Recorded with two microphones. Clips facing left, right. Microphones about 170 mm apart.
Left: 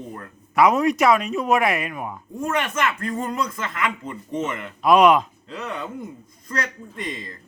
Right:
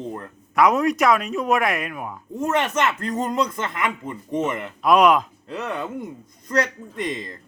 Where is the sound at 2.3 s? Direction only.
25° right (ahead or behind).